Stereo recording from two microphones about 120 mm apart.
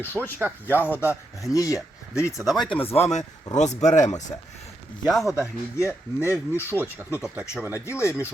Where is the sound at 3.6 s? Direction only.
75° left (ahead or behind).